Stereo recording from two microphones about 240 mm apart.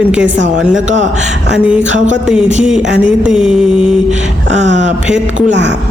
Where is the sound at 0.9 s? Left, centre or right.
Right.